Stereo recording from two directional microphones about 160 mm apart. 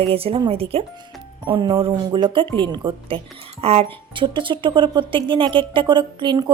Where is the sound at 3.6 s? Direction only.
40° right (ahead or behind).